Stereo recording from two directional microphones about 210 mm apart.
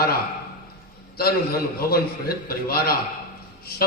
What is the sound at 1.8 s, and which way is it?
A man's voice, 45° left (ahead or behind).